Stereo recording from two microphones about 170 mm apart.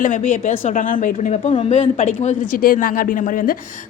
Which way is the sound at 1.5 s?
35° left (ahead or behind).